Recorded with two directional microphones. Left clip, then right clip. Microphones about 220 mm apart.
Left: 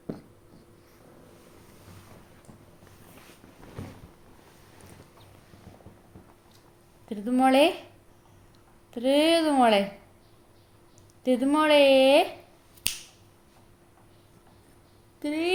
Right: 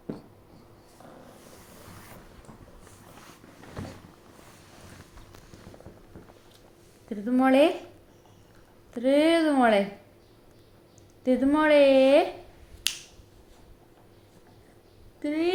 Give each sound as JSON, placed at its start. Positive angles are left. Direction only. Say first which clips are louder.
{"t": 7.1, "sound": "a woman's voice", "louder": "left 1 dB", "side_deg": 30}
{"t": 9.0, "sound": "a woman's voice", "louder": "even", "side_deg": 30}
{"t": 11.3, "sound": "a woman's voice", "louder": "even", "side_deg": 30}
{"t": 15.2, "sound": "a sound", "louder": "right 1 dB", "side_deg": 35}